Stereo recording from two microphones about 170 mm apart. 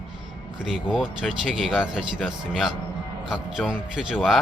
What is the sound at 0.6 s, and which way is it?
Speech, 5° right (ahead or behind).